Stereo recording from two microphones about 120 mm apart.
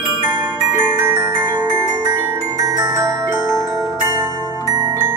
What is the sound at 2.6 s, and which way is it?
Glockenspiel, 30° right (ahead or behind).